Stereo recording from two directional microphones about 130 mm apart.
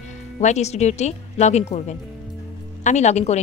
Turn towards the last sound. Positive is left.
turn(degrees=60)  # may be behind; listen again after turning